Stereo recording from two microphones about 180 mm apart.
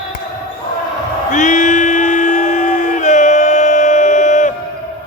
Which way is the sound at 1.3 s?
45° left (ahead or behind).